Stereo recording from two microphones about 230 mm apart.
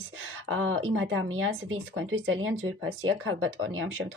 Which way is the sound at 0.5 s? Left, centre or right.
Right.